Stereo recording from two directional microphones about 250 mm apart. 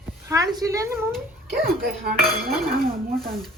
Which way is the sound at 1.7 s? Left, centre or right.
Right.